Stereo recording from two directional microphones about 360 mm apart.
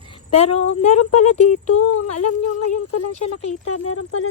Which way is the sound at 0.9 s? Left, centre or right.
Left.